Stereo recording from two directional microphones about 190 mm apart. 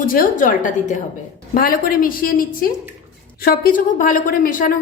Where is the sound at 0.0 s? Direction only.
50° left (ahead or behind).